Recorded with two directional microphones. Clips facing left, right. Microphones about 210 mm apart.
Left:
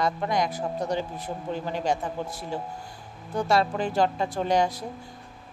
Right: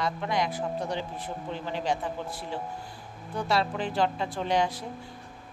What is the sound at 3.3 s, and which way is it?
Speech, 45° left (ahead or behind).